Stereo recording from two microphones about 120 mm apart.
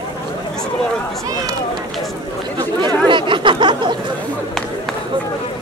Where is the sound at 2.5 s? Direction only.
40° right (ahead or behind).